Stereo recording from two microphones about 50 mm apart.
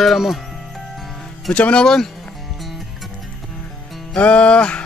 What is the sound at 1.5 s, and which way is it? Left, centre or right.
Speech, centre.